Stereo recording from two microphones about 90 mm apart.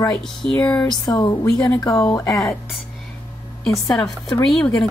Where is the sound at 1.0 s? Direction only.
50° left (ahead or behind).